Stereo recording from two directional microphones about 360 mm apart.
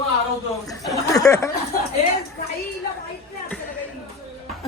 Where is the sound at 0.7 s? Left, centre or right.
Centre.